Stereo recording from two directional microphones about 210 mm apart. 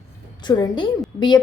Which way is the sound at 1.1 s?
30° left (ahead or behind).